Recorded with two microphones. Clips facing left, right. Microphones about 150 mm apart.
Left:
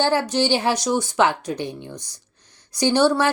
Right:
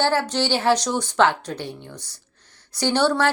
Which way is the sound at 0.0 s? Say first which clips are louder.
Left 2 dB; 15° left (ahead or behind).